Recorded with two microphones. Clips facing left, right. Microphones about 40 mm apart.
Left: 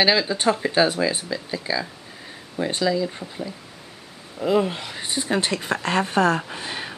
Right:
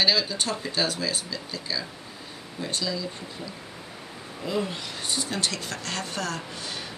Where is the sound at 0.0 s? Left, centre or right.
Left.